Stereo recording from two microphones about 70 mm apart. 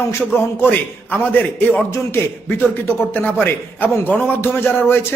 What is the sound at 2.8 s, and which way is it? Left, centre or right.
A man's voice, left.